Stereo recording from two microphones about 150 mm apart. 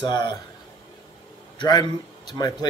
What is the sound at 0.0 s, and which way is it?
Speech, 30° left (ahead or behind).